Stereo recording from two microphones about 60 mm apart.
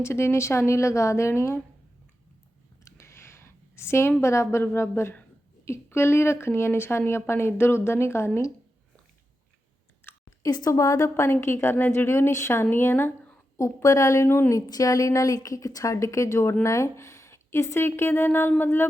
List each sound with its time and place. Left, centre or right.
0.0 s a woman's voice: left
2.8 s a sound: left
4.2 s a woman's voice: left
10.1 s chewing: left
10.4 s speech: left
11.1 s a woman's voice: left
12.7 s speech: left
13.8 s speech: left
14.5 s a woman's voice: left
17.7 s speech: left